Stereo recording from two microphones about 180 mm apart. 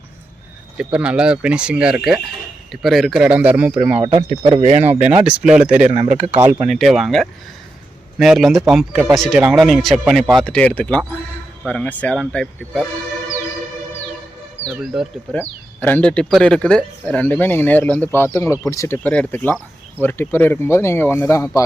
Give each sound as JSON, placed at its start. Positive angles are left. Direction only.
{"t": 0.8, "sound": "speech", "side_deg": -5}
{"t": 4.0, "sound": "speech", "side_deg": -35}
{"t": 4.8, "sound": "speech", "side_deg": -10}
{"t": 14.7, "sound": "speech", "side_deg": -5}
{"t": 15.4, "sound": "speech", "side_deg": 10}